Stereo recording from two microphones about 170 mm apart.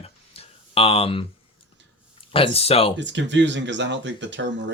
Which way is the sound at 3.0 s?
90° right.